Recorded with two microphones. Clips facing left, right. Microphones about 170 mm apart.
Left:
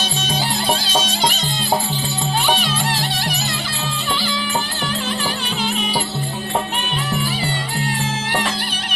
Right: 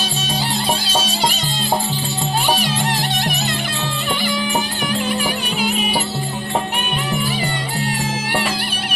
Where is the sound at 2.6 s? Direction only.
15° right (ahead or behind).